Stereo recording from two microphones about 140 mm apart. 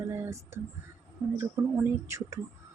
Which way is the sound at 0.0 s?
20° right (ahead or behind).